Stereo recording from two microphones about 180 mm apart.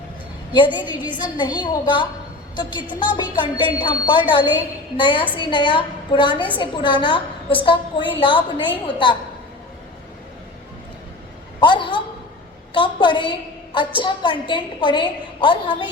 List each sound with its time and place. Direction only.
0.5 s a woman's voice: 25° left (ahead or behind)
11.6 s a sound: 25° left (ahead or behind)
13.7 s a woman's voice: 25° left (ahead or behind)